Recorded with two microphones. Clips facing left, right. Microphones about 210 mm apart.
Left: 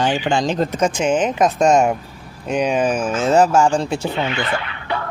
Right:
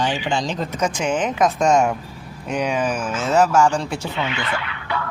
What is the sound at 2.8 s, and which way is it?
Speech, 55° left (ahead or behind).